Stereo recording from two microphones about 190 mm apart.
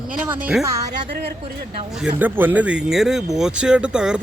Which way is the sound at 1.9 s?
5° right (ahead or behind).